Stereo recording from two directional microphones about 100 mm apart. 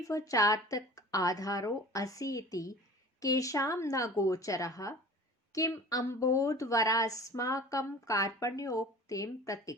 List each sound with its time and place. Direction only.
0.1 s a woman's voice: 35° left (ahead or behind)